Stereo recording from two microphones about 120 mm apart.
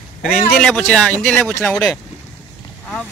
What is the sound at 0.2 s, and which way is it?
Speech, 5° left (ahead or behind).